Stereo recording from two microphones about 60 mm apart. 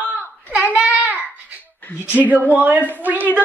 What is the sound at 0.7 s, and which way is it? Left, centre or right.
Child singing, right.